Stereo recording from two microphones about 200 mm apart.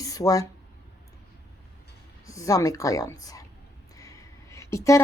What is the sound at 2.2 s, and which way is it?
A woman's voice, 15° left (ahead or behind).